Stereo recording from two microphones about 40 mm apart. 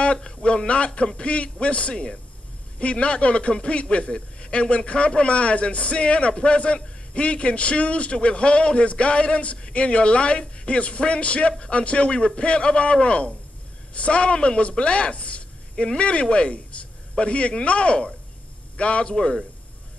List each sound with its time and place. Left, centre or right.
0.0 s a man's voice: left